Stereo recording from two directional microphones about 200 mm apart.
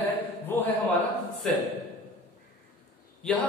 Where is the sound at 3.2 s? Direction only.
5° left (ahead or behind).